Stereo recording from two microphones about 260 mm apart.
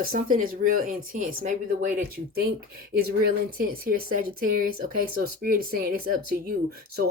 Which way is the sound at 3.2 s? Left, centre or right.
Right.